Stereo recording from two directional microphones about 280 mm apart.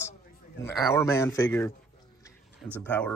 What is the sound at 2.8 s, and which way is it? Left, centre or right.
Speech, centre.